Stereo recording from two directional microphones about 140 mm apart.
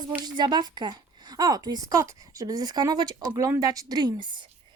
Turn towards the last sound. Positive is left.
turn(degrees=-35)  # may be behind; listen again after turning